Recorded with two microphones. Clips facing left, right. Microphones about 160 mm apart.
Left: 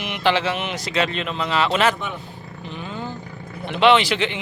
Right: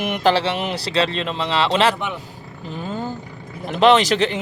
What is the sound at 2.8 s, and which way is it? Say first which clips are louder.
Speech: right 4 dB; 40° right (ahead or behind).